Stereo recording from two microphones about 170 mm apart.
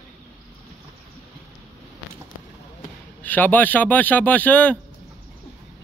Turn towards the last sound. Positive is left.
turn(degrees=10)  # may be behind; listen again after turning